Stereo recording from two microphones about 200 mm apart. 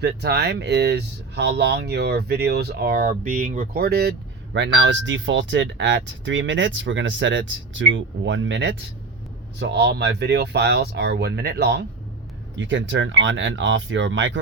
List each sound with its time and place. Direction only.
0.0 s speech: 55° right (ahead or behind)